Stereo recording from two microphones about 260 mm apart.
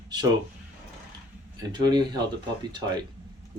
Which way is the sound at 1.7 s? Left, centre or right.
Centre.